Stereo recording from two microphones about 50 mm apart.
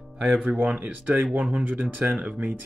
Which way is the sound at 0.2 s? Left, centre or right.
Centre.